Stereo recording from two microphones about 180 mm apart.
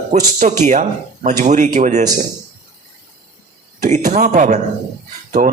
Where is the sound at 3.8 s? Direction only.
40° right (ahead or behind).